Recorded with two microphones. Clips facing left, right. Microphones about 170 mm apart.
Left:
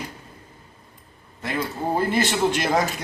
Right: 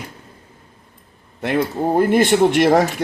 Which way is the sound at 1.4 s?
70° right (ahead or behind).